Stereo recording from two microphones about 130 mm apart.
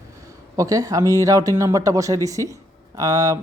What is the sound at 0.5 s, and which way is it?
Speech, 25° right (ahead or behind).